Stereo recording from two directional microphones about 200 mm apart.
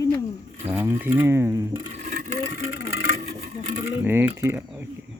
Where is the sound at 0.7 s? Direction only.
10° right (ahead or behind).